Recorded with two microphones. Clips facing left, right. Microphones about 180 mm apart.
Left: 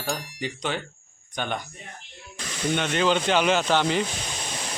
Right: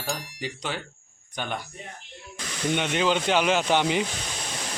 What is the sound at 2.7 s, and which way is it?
Speech, 10° right (ahead or behind).